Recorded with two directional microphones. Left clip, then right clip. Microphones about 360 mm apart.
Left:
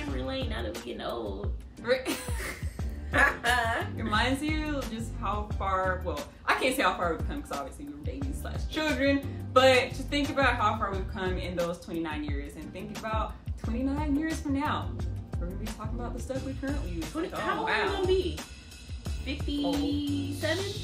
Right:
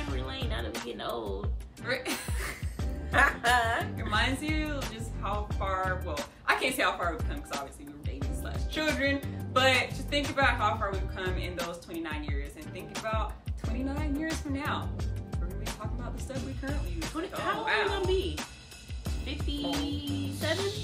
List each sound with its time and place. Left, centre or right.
0.3 s music: centre
8.2 s a woman's voice: centre